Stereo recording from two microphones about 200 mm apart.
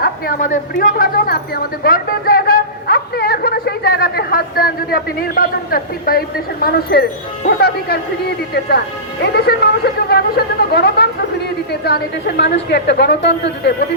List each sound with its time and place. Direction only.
0.0 s a woman's voice: 45° left (ahead or behind)
9.2 s a sound: 55° left (ahead or behind)
12.4 s a woman's voice: 60° left (ahead or behind)